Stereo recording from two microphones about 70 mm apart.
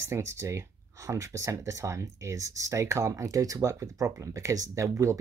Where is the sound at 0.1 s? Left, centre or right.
Right.